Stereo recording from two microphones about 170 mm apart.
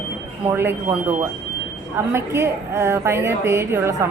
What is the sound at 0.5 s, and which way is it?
A woman's voice, 15° right (ahead or behind).